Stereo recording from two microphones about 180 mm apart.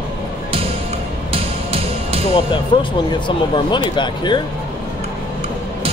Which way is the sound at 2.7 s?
25° left (ahead or behind).